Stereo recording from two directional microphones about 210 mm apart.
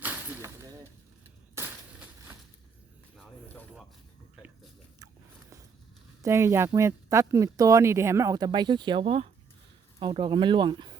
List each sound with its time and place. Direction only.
0.0 s a sound: 10° right (ahead or behind)
3.2 s snake: centre (ahead or behind)
6.2 s speech: 15° right (ahead or behind)